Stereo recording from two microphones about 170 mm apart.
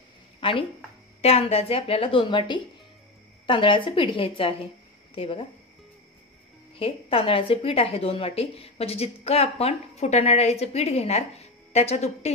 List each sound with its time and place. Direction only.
0.4 s a sound: 30° left (ahead or behind)
1.2 s a woman's voice: 35° left (ahead or behind)
6.8 s a woman's voice: 35° left (ahead or behind)